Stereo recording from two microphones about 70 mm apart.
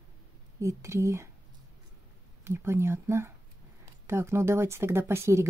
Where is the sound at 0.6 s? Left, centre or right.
Right.